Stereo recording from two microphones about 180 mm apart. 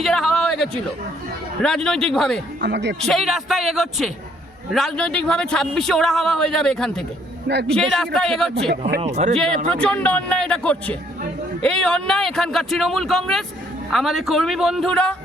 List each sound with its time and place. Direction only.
0.0 s a sound: centre (ahead or behind)
1.6 s a man's voice: 5° left (ahead or behind)
2.6 s speech: 70° right (ahead or behind)
3.0 s a man's voice: centre (ahead or behind)
9.0 s a man's voice: 40° right (ahead or behind)
9.8 s a man's voice: 5° left (ahead or behind)